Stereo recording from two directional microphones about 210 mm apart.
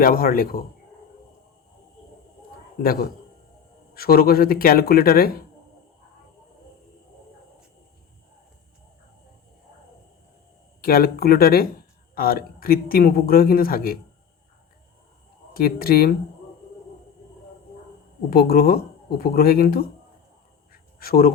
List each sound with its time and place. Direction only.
0.0 s speech: 45° left (ahead or behind)
2.8 s speech: 45° left (ahead or behind)
10.8 s speech: 45° left (ahead or behind)
15.5 s speech: 45° left (ahead or behind)
18.3 s speech: 45° left (ahead or behind)
20.7 s a sound: 45° left (ahead or behind)